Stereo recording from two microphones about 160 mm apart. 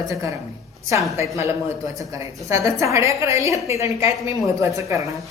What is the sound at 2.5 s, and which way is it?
A woman's voice, 20° right (ahead or behind).